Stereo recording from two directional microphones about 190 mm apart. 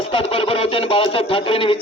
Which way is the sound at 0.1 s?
30° left (ahead or behind).